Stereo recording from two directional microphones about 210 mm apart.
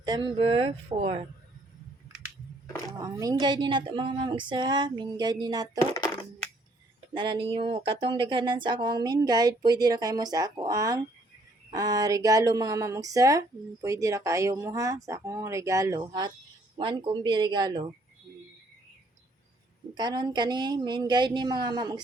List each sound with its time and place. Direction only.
0.0 s speech: 20° right (ahead or behind)
3.0 s speech: 15° right (ahead or behind)
7.1 s speech: 20° right (ahead or behind)
20.0 s speech: 20° right (ahead or behind)